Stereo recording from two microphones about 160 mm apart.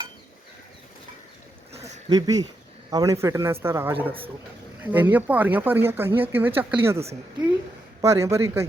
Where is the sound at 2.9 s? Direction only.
20° right (ahead or behind).